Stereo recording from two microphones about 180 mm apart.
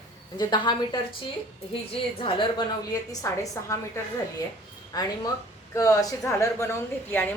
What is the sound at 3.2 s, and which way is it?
A woman's voice, 15° left (ahead or behind).